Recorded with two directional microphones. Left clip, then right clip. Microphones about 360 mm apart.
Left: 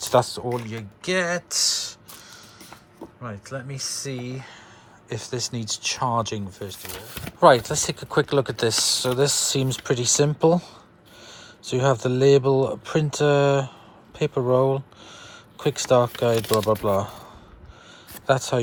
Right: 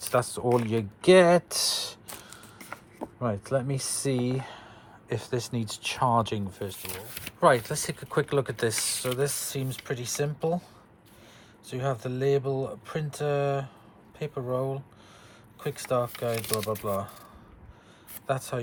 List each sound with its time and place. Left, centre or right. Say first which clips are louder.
0.0 s speech: left 6 dB; centre
3.2 s speech: right 6 dB; centre
18.3 s speech: left 9 dB; centre